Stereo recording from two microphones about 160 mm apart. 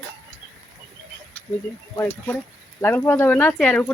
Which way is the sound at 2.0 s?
10° left (ahead or behind).